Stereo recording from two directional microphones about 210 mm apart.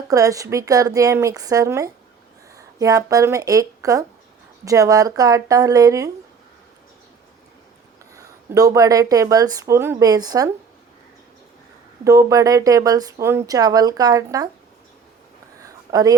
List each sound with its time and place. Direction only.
0.1 s speech: 15° right (ahead or behind)
8.1 s speech: 15° right (ahead or behind)
12.0 s speech: 15° right (ahead or behind)
15.6 s a sound: 15° right (ahead or behind)